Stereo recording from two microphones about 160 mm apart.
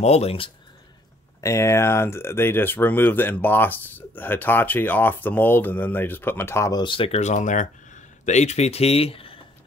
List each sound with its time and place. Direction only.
0.0 s speech: 40° left (ahead or behind)
1.4 s speech: 15° left (ahead or behind)
6.8 s speech: 35° left (ahead or behind)